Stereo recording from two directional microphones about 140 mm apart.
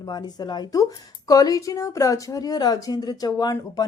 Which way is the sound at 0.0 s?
30° left (ahead or behind).